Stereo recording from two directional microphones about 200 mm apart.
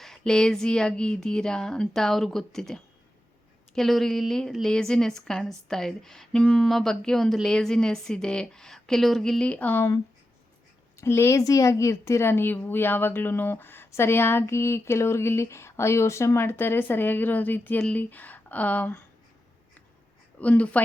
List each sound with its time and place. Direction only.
0.0 s a woman's voice: centre (ahead or behind)
11.0 s speech: 15° left (ahead or behind)
20.4 s speech: 5° left (ahead or behind)